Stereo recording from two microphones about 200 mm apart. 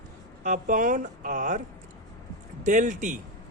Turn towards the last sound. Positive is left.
turn(degrees=-40)  # may be behind; listen again after turning